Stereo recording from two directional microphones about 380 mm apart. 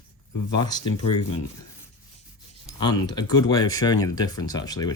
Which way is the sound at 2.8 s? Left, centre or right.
Centre.